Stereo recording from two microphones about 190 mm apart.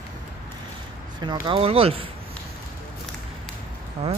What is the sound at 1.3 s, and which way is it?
Speech, 25° right (ahead or behind).